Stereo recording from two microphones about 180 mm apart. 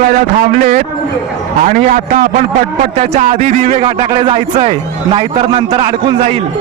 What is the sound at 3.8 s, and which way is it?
A man's voice, 30° right (ahead or behind).